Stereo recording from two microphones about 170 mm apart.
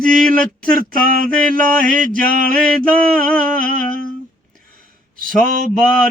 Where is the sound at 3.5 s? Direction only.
50° right (ahead or behind).